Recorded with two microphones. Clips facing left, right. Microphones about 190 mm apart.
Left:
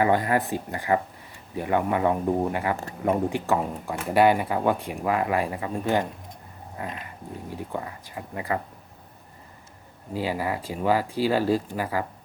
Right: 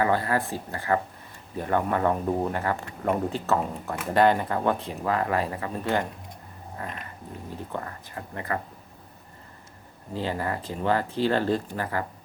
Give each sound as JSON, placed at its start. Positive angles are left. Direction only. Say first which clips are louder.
{"t": 0.0, "sound": "speech", "louder": "left 2 dB", "side_deg": 15}
{"t": 10.2, "sound": "speech", "louder": "left 2 dB", "side_deg": 10}